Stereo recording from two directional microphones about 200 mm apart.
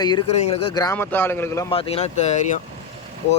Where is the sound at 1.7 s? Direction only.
30° left (ahead or behind).